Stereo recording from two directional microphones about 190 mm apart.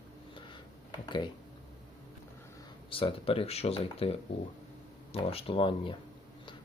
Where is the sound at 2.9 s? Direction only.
30° left (ahead or behind).